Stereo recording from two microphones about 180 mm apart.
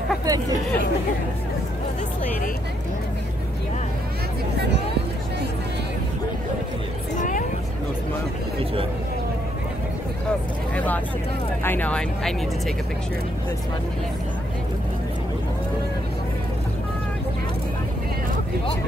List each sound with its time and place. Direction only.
0.2 s speech: 20° right (ahead or behind)
7.2 s vehicle: 45° left (ahead or behind)
11.6 s speech: 10° left (ahead or behind)